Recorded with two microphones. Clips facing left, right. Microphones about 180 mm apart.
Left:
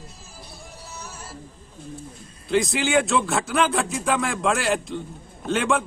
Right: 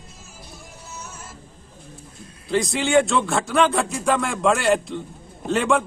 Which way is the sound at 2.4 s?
Centre (ahead or behind).